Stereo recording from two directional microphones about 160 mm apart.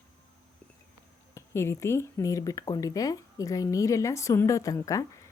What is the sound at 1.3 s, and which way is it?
A woman's voice, 15° left (ahead or behind).